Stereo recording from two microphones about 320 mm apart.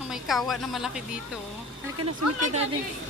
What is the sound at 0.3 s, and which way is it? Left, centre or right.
Speech, centre.